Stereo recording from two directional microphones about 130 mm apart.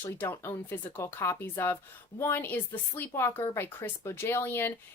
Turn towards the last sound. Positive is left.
turn(degrees=15)  # may be behind; listen again after turning